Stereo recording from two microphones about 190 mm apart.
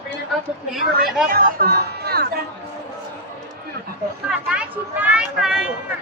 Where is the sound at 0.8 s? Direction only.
50° right (ahead or behind).